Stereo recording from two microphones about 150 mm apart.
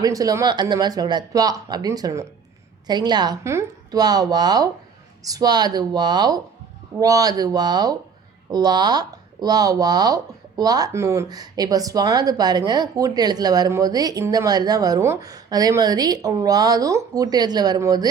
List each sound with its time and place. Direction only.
0.0 s a woman's voice: 25° right (ahead or behind)